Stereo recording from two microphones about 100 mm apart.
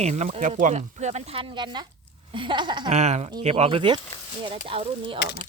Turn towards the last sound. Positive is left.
turn(degrees=-60)  # may be behind; listen again after turning